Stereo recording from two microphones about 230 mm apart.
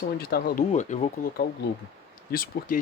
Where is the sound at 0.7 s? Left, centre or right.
Left.